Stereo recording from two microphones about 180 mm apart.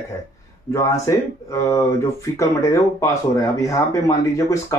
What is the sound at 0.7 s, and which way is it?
Speech, 15° left (ahead or behind).